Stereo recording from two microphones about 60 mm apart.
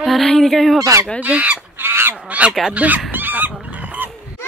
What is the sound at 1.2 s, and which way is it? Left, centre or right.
Speech, right.